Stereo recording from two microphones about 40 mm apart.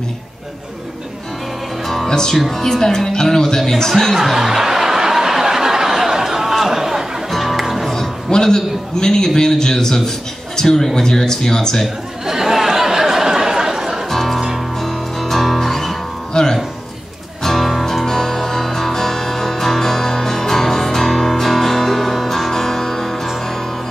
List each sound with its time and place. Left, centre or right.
2.0 s music: centre
2.3 s a man's voice: centre
4.2 s snicker: centre
7.2 s music: centre
8.3 s a man's voice: centre
12.3 s a sound: centre
14.1 s music: centre
16.3 s music: centre